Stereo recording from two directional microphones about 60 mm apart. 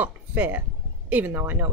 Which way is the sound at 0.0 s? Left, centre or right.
Right.